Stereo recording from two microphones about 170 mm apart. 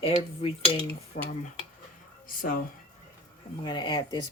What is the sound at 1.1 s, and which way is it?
Speech, 45° left (ahead or behind).